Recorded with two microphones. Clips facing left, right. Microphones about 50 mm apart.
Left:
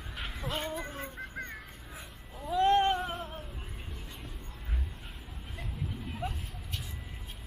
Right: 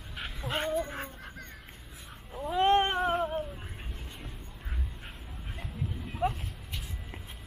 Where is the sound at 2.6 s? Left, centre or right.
Right.